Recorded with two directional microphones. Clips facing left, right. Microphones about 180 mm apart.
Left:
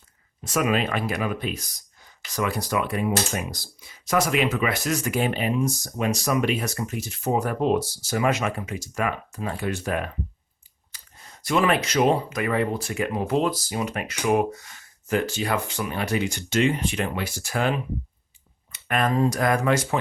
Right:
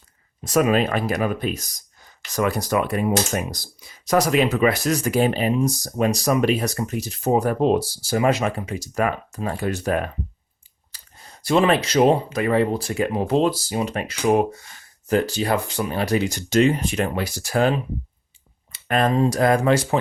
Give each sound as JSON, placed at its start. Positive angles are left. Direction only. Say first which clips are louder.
{"t": 0.4, "sound": "speech", "louder": "right 5 dB", "side_deg": -40}
{"t": 10.9, "sound": "a sound", "louder": "even", "side_deg": -35}
{"t": 11.4, "sound": "speech", "louder": "right 4 dB", "side_deg": -30}